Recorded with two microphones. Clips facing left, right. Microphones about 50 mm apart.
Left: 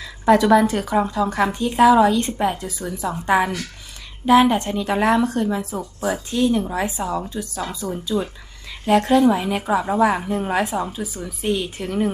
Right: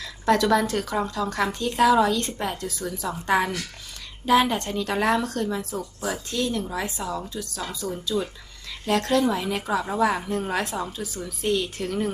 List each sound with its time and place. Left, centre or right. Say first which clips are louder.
0.0 s a woman's voice: left 5 dB; centre